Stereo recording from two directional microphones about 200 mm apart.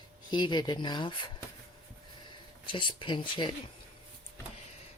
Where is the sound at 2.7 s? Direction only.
25° left (ahead or behind).